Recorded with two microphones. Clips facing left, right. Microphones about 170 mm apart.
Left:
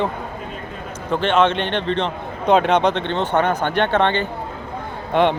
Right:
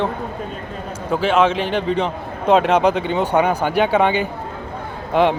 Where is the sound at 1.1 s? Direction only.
5° right (ahead or behind).